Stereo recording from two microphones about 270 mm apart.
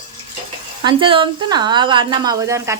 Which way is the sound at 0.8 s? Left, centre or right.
Centre.